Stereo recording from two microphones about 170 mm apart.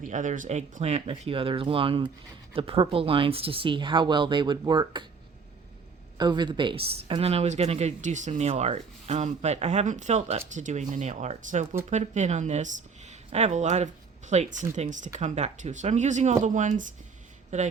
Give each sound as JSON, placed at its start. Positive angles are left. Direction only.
{"t": 0.0, "sound": "speech", "side_deg": -50}
{"t": 6.1, "sound": "speech", "side_deg": -25}